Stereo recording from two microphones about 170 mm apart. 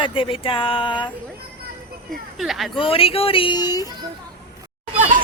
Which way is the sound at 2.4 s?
Centre (ahead or behind).